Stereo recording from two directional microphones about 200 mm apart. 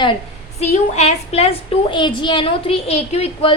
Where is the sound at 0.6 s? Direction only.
35° left (ahead or behind).